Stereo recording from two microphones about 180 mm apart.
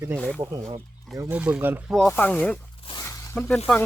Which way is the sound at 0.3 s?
20° right (ahead or behind).